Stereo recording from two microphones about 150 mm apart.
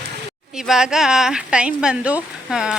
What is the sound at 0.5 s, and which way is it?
Speech, 5° right (ahead or behind).